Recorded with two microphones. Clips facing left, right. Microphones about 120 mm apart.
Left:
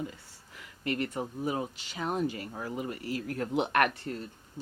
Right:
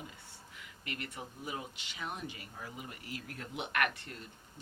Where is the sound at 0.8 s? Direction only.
40° left (ahead or behind).